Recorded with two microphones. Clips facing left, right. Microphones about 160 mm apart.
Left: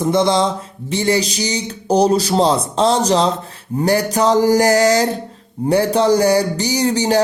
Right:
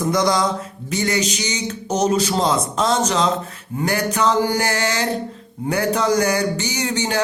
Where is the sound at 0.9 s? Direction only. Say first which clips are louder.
Left 4 dB; 30° left (ahead or behind).